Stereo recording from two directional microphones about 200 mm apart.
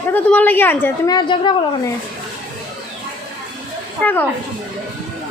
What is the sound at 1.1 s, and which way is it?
Speech, 25° left (ahead or behind).